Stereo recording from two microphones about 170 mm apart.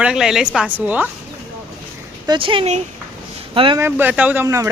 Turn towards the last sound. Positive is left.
turn(degrees=-15)  # may be behind; listen again after turning